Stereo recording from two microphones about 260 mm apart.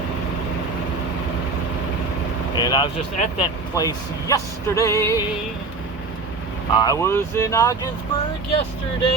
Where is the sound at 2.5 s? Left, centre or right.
Centre.